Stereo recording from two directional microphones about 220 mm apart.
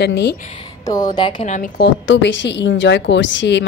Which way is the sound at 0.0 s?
50° left (ahead or behind).